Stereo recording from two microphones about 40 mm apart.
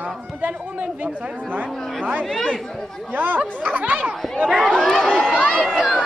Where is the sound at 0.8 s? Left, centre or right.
Right.